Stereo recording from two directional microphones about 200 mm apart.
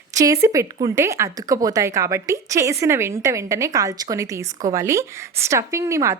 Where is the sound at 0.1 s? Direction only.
15° right (ahead or behind).